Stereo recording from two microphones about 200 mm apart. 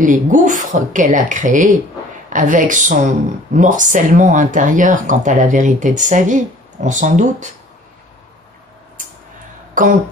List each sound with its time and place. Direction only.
0.0 s speech: 40° right (ahead or behind)